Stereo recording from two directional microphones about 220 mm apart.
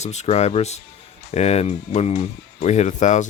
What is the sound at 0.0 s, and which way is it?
Speech, 30° left (ahead or behind).